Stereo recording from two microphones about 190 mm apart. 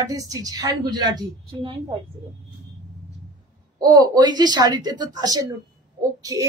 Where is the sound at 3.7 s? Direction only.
20° right (ahead or behind).